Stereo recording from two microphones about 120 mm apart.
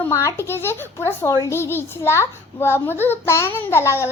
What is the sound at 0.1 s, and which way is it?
A child's voice, 25° left (ahead or behind).